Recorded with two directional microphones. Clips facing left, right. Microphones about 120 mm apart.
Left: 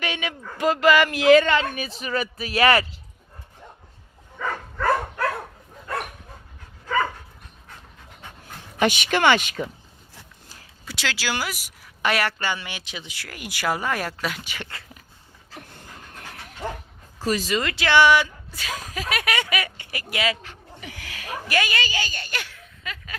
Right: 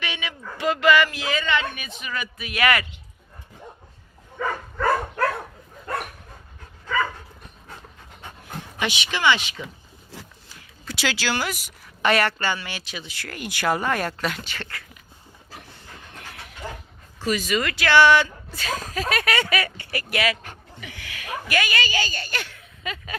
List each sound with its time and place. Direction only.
0.0 s a man's voice: 45° left (ahead or behind)
1.5 s speech: 35° left (ahead or behind)
6.8 s dog: 40° left (ahead or behind)
8.8 s a man's voice: 50° left (ahead or behind)
10.9 s speech: 5° right (ahead or behind)
11.2 s speech: 10° left (ahead or behind)
17.2 s speech: 35° left (ahead or behind)
20.8 s speech: 40° left (ahead or behind); by 22.5 s 10° left (ahead or behind)
22.8 s speech: 20° right (ahead or behind)